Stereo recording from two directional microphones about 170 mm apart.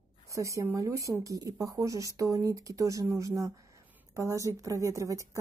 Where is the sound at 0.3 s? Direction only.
20° right (ahead or behind).